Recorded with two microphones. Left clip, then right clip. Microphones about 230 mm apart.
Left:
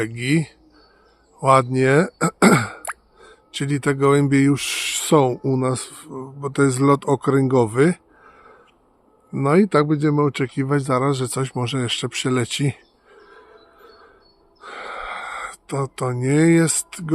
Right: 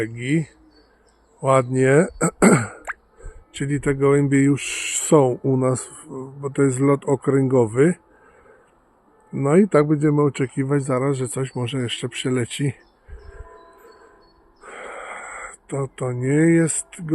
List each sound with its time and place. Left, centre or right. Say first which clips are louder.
0.0 s speech: left 2 dB; centre
9.3 s speech: even; centre
14.6 s a sound: left 3 dB; centre